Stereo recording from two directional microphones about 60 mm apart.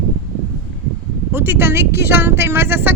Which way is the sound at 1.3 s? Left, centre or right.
Right.